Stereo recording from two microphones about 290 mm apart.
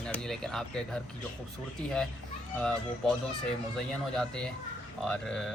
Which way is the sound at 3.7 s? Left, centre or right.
Centre.